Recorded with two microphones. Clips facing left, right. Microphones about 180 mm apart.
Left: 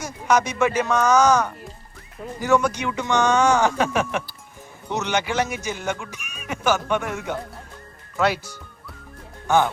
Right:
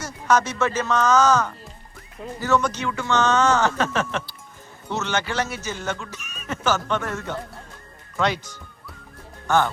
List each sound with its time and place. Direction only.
0.0 s speech: 10° left (ahead or behind)